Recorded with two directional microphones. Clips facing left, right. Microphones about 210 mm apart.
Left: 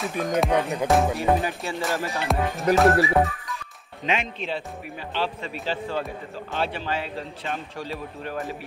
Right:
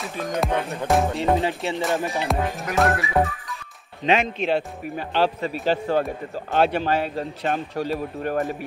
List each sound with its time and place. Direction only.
0.2 s music: centre (ahead or behind)
0.5 s speech: 15° left (ahead or behind)
0.8 s music: centre (ahead or behind)
1.1 s speech: 25° right (ahead or behind)
1.8 s music: centre (ahead or behind)
4.0 s speech: 40° right (ahead or behind)
4.4 s speech: 65° right (ahead or behind); by 8.4 s 45° right (ahead or behind)